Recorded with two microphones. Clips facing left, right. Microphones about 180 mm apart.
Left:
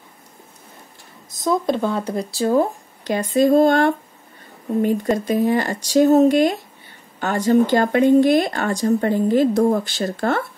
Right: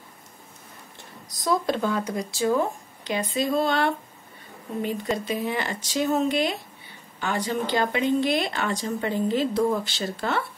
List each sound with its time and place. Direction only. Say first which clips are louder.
1.4 s speech: left 4 dB; 20° left (ahead or behind); by 10.4 s 50° left (ahead or behind)